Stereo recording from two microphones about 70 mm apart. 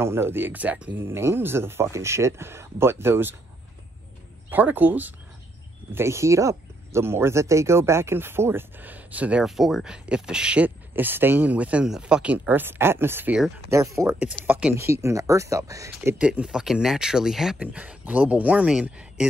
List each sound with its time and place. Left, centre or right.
0.0 s speech: right
1.0 s speech: right
4.5 s speech: right
5.9 s speech: right
9.4 s speech: centre
10.9 s speech: right; by 12.4 s centre
12.4 s speech: right
13.7 s speech: right
16.2 s speech: centre
17.6 s speech: centre